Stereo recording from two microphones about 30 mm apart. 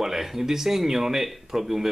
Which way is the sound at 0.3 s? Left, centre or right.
Centre.